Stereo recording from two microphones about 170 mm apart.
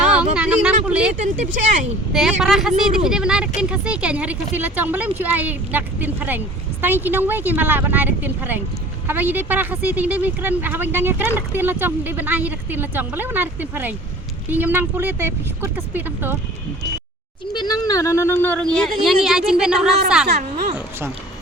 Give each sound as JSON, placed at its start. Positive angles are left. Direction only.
{"t": 0.0, "sound": "a sound", "side_deg": -5}
{"t": 2.4, "sound": "a woman's voice", "side_deg": -5}
{"t": 17.5, "sound": "a woman's voice", "side_deg": 25}